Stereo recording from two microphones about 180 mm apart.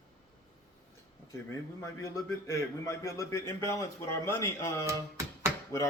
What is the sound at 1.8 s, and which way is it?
A man's voice, 15° left (ahead or behind).